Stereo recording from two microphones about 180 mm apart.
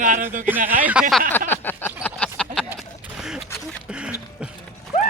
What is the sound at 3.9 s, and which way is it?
Music, 5° right (ahead or behind).